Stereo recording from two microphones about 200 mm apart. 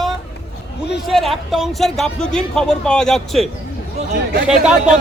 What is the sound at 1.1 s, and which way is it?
Speech, centre (ahead or behind).